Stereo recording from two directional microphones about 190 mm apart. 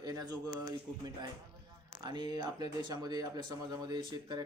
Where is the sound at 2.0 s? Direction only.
20° right (ahead or behind).